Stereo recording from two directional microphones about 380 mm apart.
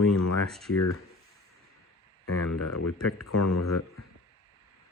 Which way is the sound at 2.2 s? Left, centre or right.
Left.